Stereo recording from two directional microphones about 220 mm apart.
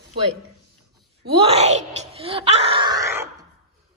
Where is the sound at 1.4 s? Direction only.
30° right (ahead or behind); by 3.3 s 15° right (ahead or behind).